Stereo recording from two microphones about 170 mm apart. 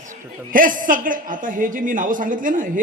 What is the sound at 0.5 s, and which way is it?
A woman's voice, 50° right (ahead or behind).